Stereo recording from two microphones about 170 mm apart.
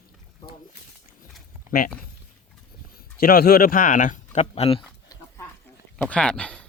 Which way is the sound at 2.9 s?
60° left (ahead or behind).